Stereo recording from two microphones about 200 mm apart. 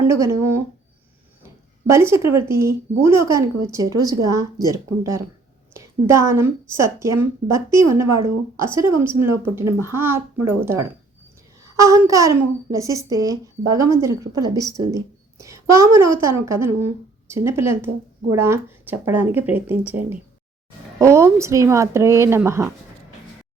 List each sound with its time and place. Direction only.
0.1 s a child's voice: 15° right (ahead or behind)
1.9 s a child's voice: 15° right (ahead or behind)